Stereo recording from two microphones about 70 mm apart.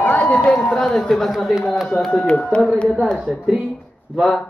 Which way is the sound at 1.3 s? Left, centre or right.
Centre.